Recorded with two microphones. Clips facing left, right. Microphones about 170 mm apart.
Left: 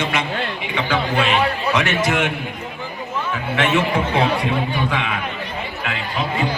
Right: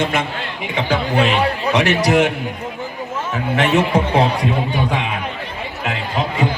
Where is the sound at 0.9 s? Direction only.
40° right (ahead or behind).